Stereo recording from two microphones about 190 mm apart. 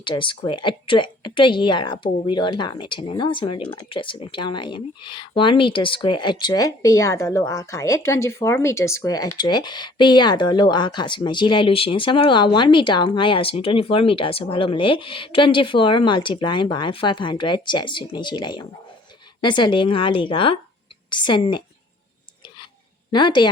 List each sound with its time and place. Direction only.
0.0 s a woman's voice: 25° left (ahead or behind)
23.1 s a woman's voice: 25° left (ahead or behind)